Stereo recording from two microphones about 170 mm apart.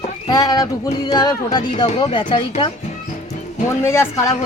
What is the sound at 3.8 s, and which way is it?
Speech, 15° left (ahead or behind).